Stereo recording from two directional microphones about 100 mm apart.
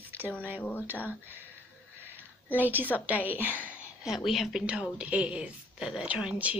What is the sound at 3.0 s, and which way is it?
Speech, 15° right (ahead or behind).